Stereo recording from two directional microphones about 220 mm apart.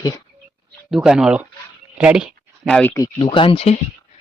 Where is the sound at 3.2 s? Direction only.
25° left (ahead or behind).